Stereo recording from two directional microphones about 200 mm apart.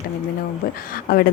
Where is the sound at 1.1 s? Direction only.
50° left (ahead or behind).